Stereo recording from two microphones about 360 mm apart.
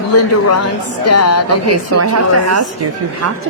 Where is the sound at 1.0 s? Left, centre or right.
Left.